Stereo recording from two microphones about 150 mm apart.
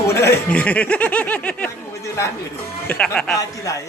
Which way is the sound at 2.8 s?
5° left (ahead or behind).